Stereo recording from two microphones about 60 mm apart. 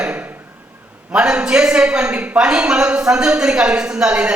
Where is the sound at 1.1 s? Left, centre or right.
Centre.